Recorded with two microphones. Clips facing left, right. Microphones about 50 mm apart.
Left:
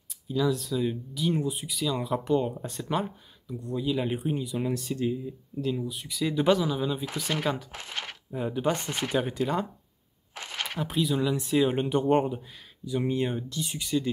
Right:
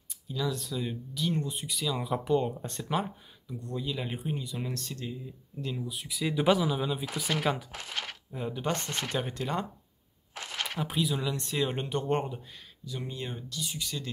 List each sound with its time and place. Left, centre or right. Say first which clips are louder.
0.3 s speech: left 6 dB; centre
5.6 s speech: left 6 dB; centre
7.8 s speech: left 1 dB; left
8.3 s speech: left 6 dB; centre
9.2 s speech: left 4 dB; centre
10.3 s a sound: left 1 dB; left
10.8 s speech: left 5 dB; centre
12.8 s speech: left 10 dB; left